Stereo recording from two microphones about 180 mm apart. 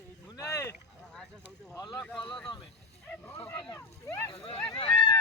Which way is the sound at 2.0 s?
5° left (ahead or behind).